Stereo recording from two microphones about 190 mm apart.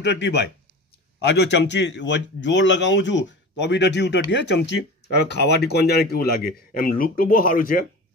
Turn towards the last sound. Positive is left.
turn(degrees=45)  # may be behind; listen again after turning